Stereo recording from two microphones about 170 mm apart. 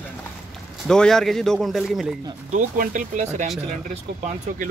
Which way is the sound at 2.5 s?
50° right (ahead or behind).